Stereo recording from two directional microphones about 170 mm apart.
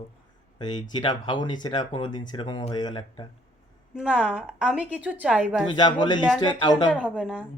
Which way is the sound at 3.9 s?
5° right (ahead or behind).